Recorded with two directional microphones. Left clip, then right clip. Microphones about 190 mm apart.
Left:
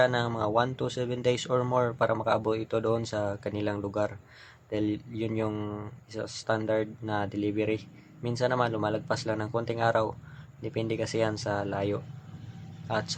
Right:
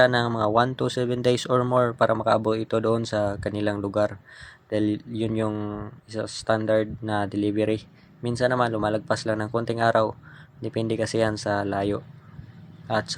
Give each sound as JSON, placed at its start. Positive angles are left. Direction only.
{"t": 0.0, "sound": "speech", "side_deg": -25}